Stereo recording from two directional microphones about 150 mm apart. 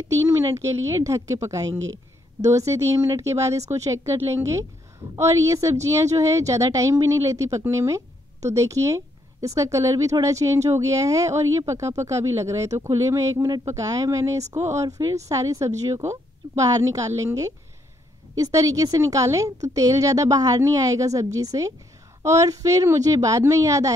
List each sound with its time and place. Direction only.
0.6 s a woman's voice: 20° right (ahead or behind)